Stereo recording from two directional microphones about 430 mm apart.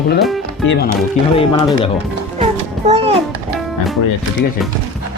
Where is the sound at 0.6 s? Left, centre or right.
Left.